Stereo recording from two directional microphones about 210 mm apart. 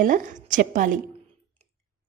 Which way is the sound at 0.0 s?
40° right (ahead or behind).